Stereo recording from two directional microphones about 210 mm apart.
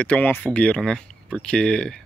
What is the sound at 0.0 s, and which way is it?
Speech, 5° left (ahead or behind).